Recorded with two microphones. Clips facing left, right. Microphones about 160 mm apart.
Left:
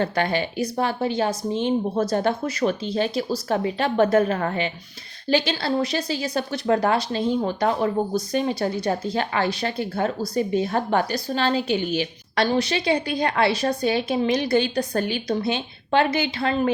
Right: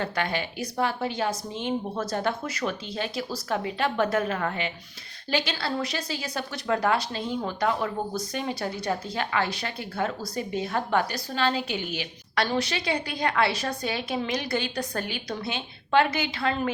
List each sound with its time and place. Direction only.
0.0 s a woman's voice: 30° left (ahead or behind)